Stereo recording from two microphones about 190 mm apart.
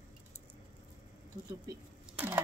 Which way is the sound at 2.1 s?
10° right (ahead or behind).